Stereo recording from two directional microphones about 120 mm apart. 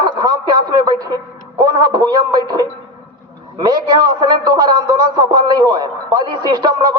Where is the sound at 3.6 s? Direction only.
35° right (ahead or behind).